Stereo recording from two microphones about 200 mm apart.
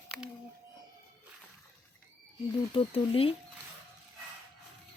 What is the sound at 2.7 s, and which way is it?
Speech, 25° left (ahead or behind).